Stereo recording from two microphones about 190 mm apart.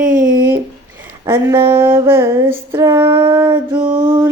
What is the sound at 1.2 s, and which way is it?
Music, 20° right (ahead or behind).